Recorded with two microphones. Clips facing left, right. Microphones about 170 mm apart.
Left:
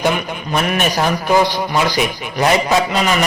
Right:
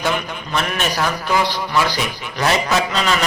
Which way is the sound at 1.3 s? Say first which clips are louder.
Left 5 dB; 20° left (ahead or behind).